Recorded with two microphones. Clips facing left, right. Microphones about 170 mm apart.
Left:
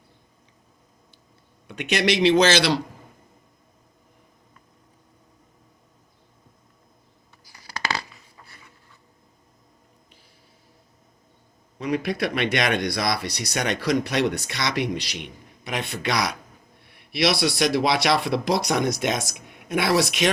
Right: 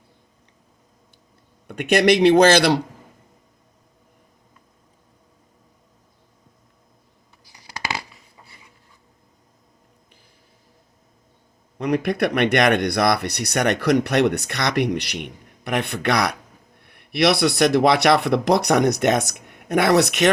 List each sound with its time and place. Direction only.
1.6 s speech: 55° right (ahead or behind)
7.5 s a sound: 20° right (ahead or behind)
11.8 s speech: 60° right (ahead or behind)